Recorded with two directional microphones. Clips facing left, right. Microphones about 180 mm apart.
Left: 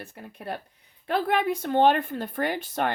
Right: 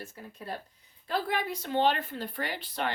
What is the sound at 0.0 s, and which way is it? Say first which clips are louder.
Speech: left 4 dB; 65° left (ahead or behind).